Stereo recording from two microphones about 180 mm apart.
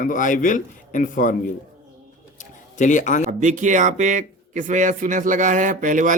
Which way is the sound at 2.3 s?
45° left (ahead or behind).